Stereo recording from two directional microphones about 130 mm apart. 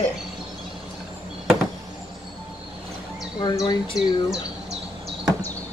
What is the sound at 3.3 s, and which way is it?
Speech, 35° left (ahead or behind).